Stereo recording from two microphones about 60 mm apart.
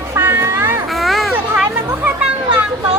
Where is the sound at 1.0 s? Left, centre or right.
Centre.